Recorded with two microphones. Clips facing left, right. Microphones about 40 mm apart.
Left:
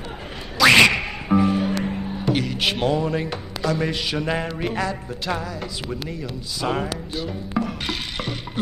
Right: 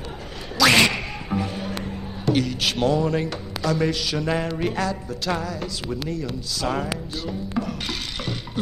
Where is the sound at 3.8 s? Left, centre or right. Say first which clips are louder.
Even; centre.